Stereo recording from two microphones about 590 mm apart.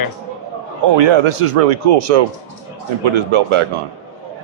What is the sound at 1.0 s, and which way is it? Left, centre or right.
A man's voice, right.